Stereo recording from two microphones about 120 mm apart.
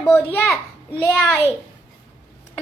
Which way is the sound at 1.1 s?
5° left (ahead or behind).